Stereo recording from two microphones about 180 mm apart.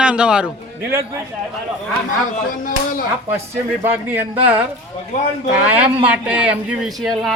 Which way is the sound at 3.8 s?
10° right (ahead or behind).